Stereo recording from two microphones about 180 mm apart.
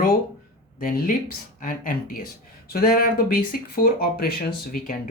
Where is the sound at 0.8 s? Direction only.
50° left (ahead or behind).